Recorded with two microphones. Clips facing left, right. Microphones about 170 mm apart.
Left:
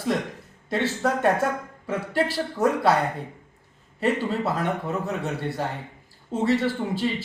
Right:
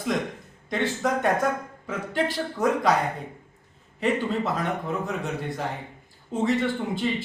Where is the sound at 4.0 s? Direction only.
5° left (ahead or behind).